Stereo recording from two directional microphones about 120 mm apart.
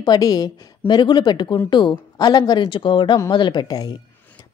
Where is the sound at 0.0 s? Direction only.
35° left (ahead or behind).